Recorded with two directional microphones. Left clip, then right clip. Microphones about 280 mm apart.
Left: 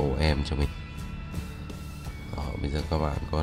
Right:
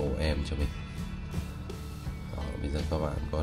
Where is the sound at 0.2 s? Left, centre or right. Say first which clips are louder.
Left 4 dB; centre.